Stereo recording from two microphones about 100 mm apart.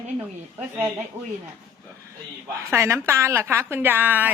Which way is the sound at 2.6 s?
30° right (ahead or behind).